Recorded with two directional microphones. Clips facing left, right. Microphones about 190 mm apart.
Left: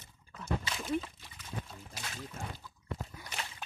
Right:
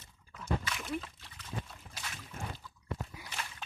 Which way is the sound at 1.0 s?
5° left (ahead or behind).